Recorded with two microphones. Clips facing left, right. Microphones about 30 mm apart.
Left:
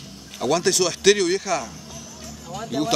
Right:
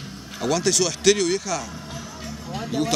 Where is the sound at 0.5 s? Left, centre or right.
Centre.